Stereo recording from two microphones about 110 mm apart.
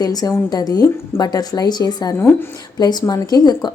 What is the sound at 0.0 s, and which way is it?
A woman's voice, 35° left (ahead or behind).